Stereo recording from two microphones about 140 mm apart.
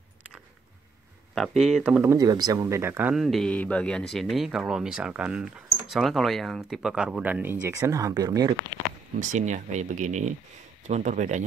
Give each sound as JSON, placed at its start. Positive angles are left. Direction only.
{"t": 1.3, "sound": "speech", "side_deg": 0}
{"t": 2.0, "sound": "speech", "side_deg": -25}
{"t": 3.2, "sound": "speech", "side_deg": 0}
{"t": 7.6, "sound": "speech", "side_deg": -20}
{"t": 9.2, "sound": "speech", "side_deg": -60}